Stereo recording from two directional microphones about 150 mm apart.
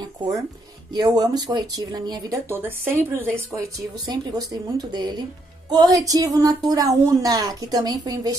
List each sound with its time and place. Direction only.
0.9 s speech: 25° right (ahead or behind)